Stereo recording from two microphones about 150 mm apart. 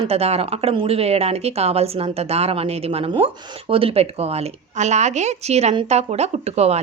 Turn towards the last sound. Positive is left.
turn(degrees=-45)  # may be behind; listen again after turning